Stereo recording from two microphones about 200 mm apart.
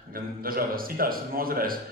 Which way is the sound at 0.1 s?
45° right (ahead or behind).